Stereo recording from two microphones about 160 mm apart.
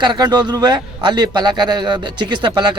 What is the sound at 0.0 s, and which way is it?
A man's voice, 30° right (ahead or behind).